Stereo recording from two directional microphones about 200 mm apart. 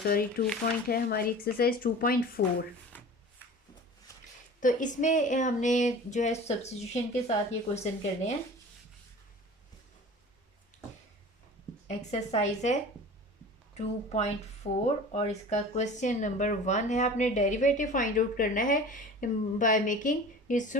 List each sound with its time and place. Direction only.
0.0 s speech: 50° left (ahead or behind)
2.9 s shuffling cards: 10° left (ahead or behind)
4.1 s a sound: 15° left (ahead or behind)
4.6 s speech: 40° left (ahead or behind)
10.7 s a sound: 35° left (ahead or behind)
11.9 s speech: 35° left (ahead or behind)
13.7 s speech: 35° left (ahead or behind)